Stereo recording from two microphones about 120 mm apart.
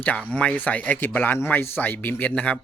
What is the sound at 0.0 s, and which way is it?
Speech, 10° left (ahead or behind).